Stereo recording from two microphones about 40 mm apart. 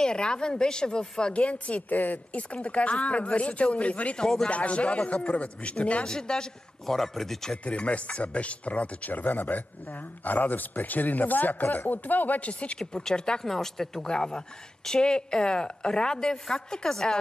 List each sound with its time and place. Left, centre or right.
0.0 s a woman's voice: left
1.3 s speech: left
1.9 s speech: left
4.2 s speech: centre
4.5 s speech: left
6.0 s a woman's voice: centre
7.0 s speech: centre
7.6 s speech: left
9.1 s speech: left
12.4 s speech: left
13.1 s a woman's voice: left
13.4 s a woman's voice: centre